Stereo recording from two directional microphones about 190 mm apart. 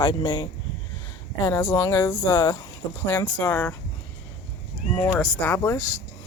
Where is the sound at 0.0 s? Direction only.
20° left (ahead or behind).